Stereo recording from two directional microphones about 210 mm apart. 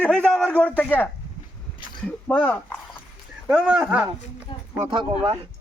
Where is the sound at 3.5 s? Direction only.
5° right (ahead or behind).